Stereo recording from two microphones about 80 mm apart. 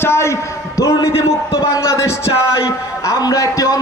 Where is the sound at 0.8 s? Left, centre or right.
Left.